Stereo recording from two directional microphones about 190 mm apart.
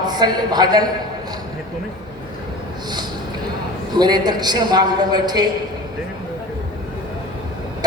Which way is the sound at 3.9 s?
20° right (ahead or behind).